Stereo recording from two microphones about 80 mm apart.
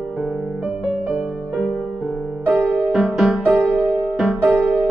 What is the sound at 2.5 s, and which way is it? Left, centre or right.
Music, centre.